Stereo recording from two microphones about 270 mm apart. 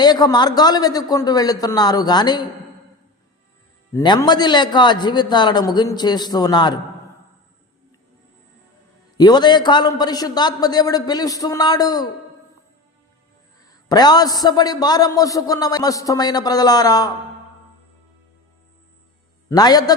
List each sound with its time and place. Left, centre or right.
0.0 s a man's voice: centre
3.9 s a man's voice: centre
9.1 s a man's voice: centre
13.8 s a man's voice: centre
19.5 s a man's voice: centre